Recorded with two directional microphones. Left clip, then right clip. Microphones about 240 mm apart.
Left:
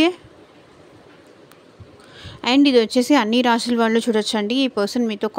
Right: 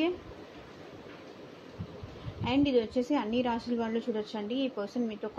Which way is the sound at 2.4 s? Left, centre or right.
Left.